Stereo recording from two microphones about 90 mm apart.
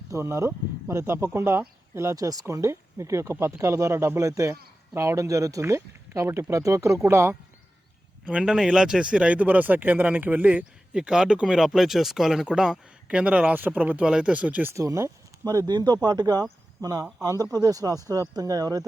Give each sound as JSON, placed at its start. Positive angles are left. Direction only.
{"t": 0.1, "sound": "speech", "side_deg": -30}
{"t": 2.1, "sound": "speech", "side_deg": -40}
{"t": 8.2, "sound": "speech", "side_deg": -10}
{"t": 14.8, "sound": "speech", "side_deg": -35}